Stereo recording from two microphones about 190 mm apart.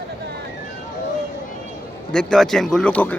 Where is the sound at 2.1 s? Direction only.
5° left (ahead or behind).